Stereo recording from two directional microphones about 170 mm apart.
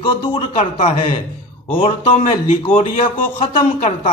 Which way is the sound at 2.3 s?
40° left (ahead or behind).